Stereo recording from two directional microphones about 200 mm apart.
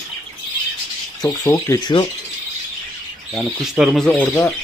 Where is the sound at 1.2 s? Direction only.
15° left (ahead or behind).